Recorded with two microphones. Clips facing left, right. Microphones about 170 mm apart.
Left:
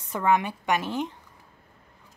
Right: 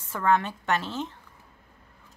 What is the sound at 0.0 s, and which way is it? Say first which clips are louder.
Speech: left 1 dB; 15° left (ahead or behind).